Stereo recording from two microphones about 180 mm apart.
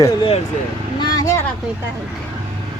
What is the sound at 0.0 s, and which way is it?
Speech, 25° left (ahead or behind).